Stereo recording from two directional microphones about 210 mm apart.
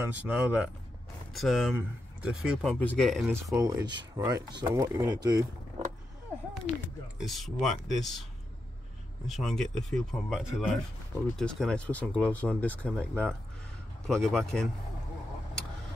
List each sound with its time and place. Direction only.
0.0 s speech: 5° right (ahead or behind)
3.5 s speech: 15° right (ahead or behind)
7.2 s speech: centre (ahead or behind)
9.3 s speech: centre (ahead or behind)